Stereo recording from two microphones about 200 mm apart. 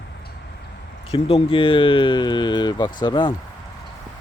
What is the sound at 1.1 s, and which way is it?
Speech, 25° left (ahead or behind).